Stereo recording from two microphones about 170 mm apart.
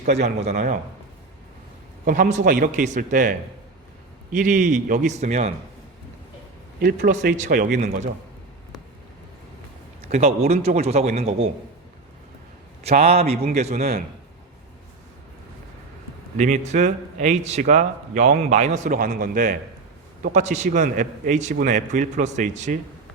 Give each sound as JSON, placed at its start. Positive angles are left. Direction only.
{"t": 0.0, "sound": "speech", "side_deg": -40}
{"t": 2.0, "sound": "speech", "side_deg": -55}
{"t": 6.7, "sound": "a man's voice", "side_deg": -65}
{"t": 7.3, "sound": "speech", "side_deg": -50}
{"t": 10.0, "sound": "speech", "side_deg": -40}
{"t": 12.8, "sound": "speech", "side_deg": -40}
{"t": 16.4, "sound": "speech", "side_deg": -45}
{"t": 18.9, "sound": "a man's voice", "side_deg": -60}
{"t": 20.2, "sound": "speech", "side_deg": -45}